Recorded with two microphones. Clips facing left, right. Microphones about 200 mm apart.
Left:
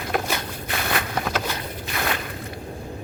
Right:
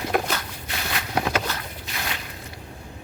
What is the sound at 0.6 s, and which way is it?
Walk, 55° left (ahead or behind).